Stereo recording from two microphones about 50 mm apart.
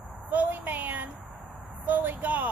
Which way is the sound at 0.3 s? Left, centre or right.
Right.